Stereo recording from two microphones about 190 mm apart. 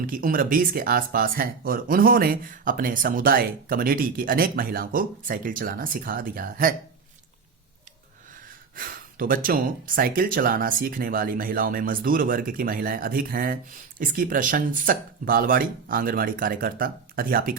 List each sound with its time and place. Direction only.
0.1 s speech: 45° right (ahead or behind)
8.7 s speech: 50° right (ahead or behind)